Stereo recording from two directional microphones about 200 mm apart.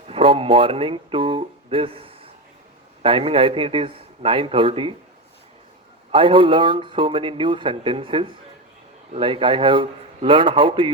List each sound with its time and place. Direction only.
0.1 s speech: 25° right (ahead or behind)
6.1 s speech: 25° right (ahead or behind)